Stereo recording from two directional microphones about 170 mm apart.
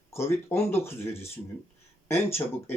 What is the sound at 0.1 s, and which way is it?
Speech, 15° left (ahead or behind).